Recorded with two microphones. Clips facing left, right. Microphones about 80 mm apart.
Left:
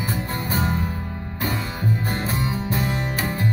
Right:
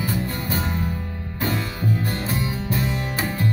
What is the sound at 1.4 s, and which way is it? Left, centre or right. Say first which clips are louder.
Music: right 1 dB; centre.